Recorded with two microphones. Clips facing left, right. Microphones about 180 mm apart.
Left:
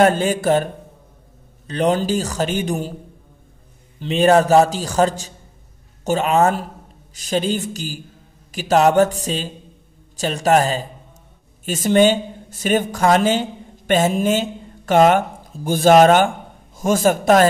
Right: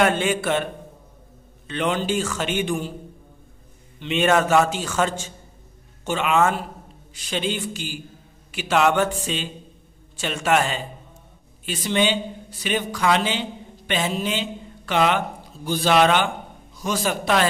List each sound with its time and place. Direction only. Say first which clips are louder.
0.0 s a man's voice: left 5 dB; 40° left (ahead or behind)
1.7 s a man's voice: left 5 dB; 40° left (ahead or behind)
4.0 s a man's voice: left 5 dB; 35° left (ahead or behind)